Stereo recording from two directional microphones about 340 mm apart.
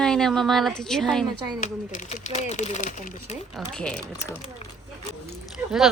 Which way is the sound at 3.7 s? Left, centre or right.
Centre.